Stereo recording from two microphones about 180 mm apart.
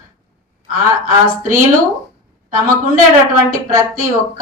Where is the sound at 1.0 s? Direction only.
45° right (ahead or behind).